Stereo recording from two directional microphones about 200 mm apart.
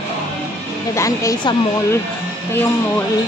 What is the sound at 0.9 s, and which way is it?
A woman's voice, 15° left (ahead or behind).